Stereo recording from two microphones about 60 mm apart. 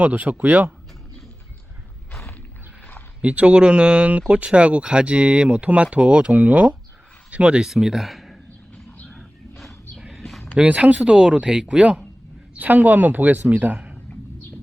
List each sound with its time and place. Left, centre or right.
0.0 s speech: right
3.2 s speech: centre
9.0 s wild animals: centre
10.0 s a sound: centre
10.5 s speech: centre